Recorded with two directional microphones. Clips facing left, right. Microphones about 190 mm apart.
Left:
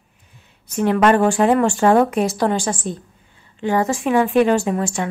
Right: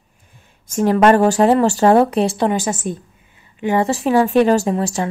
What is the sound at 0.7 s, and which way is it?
Speech, 40° right (ahead or behind).